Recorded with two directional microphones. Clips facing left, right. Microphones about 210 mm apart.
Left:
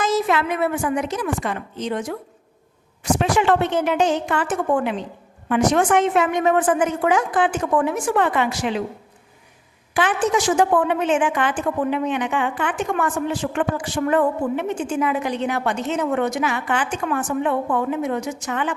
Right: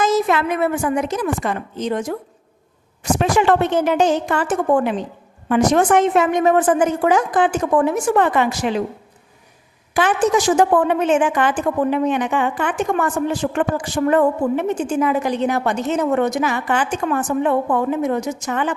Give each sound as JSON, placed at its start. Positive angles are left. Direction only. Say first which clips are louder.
{"t": 0.0, "sound": "a woman's voice", "louder": "right 3 dB", "side_deg": -45}
{"t": 3.2, "sound": "a woman's voice", "louder": "right 3 dB", "side_deg": -45}
{"t": 9.9, "sound": "a woman's voice", "louder": "right 3 dB", "side_deg": -40}